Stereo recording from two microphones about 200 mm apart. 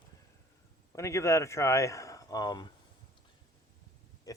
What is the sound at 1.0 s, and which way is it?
Speech, 15° left (ahead or behind).